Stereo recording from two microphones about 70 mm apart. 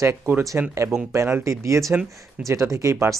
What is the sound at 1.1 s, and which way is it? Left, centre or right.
Speech, right.